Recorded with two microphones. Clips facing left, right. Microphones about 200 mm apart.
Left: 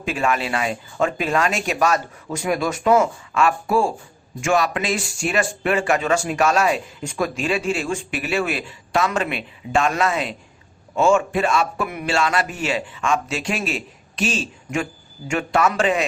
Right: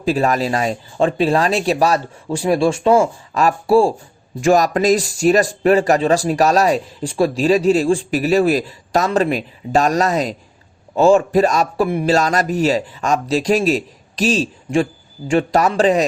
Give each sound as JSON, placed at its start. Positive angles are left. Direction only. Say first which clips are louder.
{"t": 0.0, "sound": "speech", "louder": "right 6 dB", "side_deg": -35}